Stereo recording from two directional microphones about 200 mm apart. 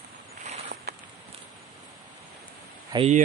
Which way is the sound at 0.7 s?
50° right (ahead or behind).